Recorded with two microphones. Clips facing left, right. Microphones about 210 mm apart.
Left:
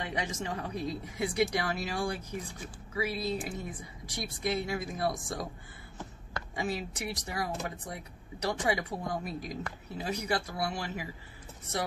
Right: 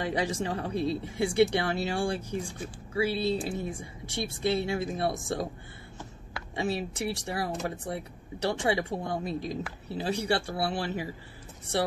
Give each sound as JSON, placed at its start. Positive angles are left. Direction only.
{"t": 0.0, "sound": "speech", "side_deg": -35}
{"t": 6.5, "sound": "speech", "side_deg": -30}